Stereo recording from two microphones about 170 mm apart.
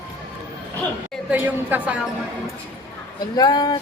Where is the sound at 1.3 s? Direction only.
10° right (ahead or behind).